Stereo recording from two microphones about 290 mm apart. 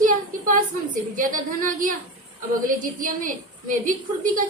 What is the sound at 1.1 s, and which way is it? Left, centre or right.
A woman's voice, right.